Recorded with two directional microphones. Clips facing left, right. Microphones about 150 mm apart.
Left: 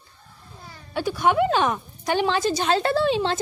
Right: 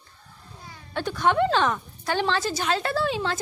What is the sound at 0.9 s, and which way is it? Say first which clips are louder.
A woman's voice: left 2 dB; 10° left (ahead or behind).